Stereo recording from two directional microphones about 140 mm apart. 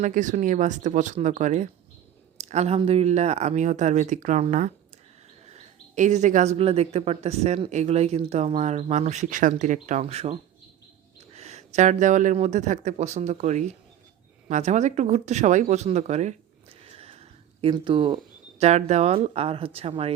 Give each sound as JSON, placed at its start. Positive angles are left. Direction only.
{"t": 0.0, "sound": "speech", "side_deg": -65}
{"t": 11.3, "sound": "speech", "side_deg": -50}
{"t": 16.8, "sound": "a sound", "side_deg": -45}
{"t": 18.6, "sound": "speech", "side_deg": -55}